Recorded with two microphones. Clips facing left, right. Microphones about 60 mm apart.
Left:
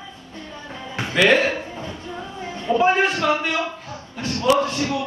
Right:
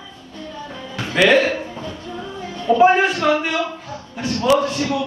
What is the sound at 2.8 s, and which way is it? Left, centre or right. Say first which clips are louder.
Speech: right 4 dB; right.